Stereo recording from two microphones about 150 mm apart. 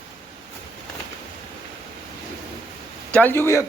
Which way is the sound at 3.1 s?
15° left (ahead or behind).